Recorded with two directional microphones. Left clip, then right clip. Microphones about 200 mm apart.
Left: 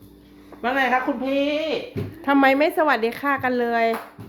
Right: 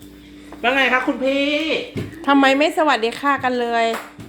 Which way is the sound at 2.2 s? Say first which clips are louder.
Right 3 dB; 10° left (ahead or behind).